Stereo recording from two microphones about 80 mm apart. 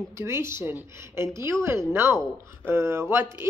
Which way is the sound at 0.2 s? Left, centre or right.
Right.